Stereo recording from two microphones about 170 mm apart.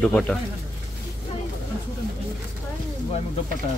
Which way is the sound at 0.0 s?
5° left (ahead or behind).